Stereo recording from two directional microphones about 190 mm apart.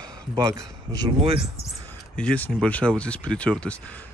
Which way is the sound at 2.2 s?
5° left (ahead or behind).